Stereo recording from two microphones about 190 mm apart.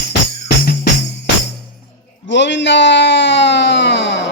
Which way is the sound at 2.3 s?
70° left (ahead or behind).